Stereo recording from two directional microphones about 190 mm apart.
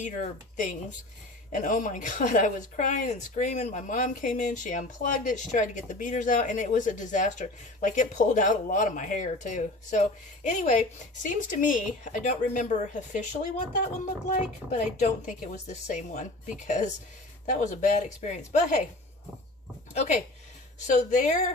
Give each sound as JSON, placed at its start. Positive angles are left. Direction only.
{"t": 0.0, "sound": "speech", "side_deg": 40}
{"t": 14.3, "sound": "speech", "side_deg": 40}
{"t": 19.9, "sound": "speech", "side_deg": 35}